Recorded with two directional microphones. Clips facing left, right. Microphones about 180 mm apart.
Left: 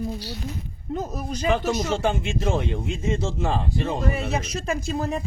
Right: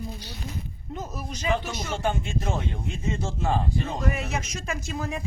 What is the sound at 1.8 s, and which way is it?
Speech, 90° left.